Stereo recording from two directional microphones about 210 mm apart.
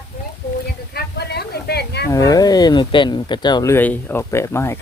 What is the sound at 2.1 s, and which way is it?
Speech, 15° left (ahead or behind).